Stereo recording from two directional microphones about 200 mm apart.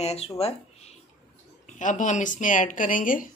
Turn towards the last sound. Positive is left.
turn(degrees=45)  # may be behind; listen again after turning